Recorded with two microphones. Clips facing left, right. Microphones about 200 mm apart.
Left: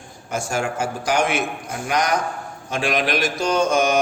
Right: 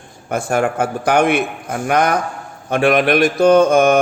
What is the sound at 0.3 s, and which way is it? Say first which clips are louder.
Mantra: right 7 dB; 55° right (ahead or behind).